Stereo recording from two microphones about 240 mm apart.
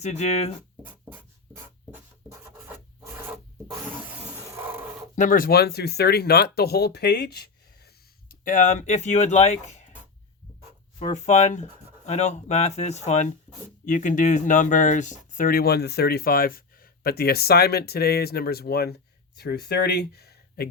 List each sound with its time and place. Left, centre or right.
0.0 s speech: left
0.8 s scratch: centre
4.5 s a sound: centre
5.1 s speech: left
11.1 s speech: left